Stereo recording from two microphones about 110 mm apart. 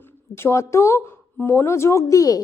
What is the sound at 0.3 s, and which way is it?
A woman's voice, 25° left (ahead or behind).